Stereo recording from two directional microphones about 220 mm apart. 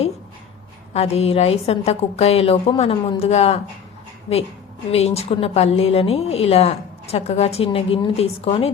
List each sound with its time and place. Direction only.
0.9 s a woman's voice: 30° left (ahead or behind)
4.9 s a woman's voice: 30° left (ahead or behind)